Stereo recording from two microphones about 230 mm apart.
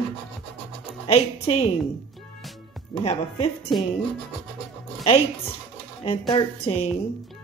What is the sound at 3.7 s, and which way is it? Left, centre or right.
Speech, centre.